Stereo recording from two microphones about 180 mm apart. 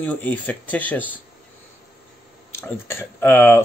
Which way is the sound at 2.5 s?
15° left (ahead or behind).